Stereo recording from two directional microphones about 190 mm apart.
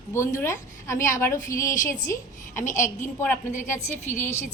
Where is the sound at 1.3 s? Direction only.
45° left (ahead or behind).